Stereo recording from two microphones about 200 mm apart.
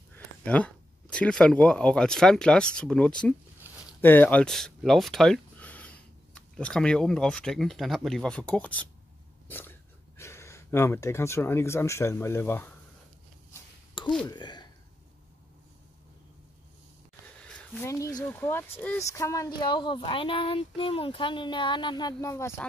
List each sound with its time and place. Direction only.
0.1 s speech: 5° left (ahead or behind)
14.0 s a sound: 25° left (ahead or behind)
14.3 s speech: 20° left (ahead or behind)
17.4 s speech: 5° left (ahead or behind)